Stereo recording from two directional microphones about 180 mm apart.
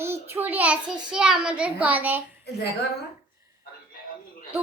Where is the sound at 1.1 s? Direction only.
5° right (ahead or behind).